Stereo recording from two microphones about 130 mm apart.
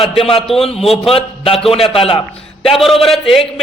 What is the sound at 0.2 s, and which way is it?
Speech, 45° left (ahead or behind).